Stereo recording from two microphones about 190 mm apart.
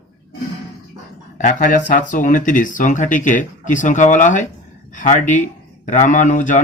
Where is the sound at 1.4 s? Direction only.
40° left (ahead or behind).